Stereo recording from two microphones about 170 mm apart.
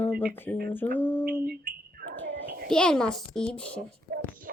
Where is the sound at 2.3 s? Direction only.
75° right (ahead or behind).